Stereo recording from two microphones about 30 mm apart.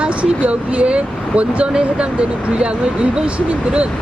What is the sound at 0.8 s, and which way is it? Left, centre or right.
Speech, right.